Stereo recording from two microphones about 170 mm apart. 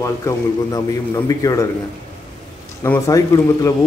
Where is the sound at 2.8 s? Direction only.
15° left (ahead or behind).